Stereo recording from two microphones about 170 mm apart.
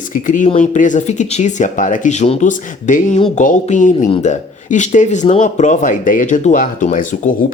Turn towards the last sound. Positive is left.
turn(degrees=50)  # may be behind; listen again after turning